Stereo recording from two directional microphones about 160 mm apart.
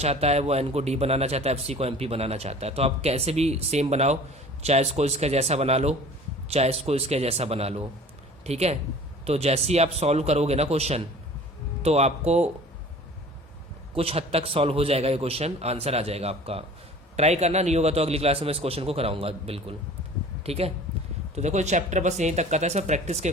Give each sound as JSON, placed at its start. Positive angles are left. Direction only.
{"t": 0.0, "sound": "a man's voice", "side_deg": -40}
{"t": 13.9, "sound": "a man's voice", "side_deg": -35}